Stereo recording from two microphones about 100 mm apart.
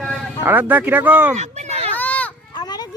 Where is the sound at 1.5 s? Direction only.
90° right.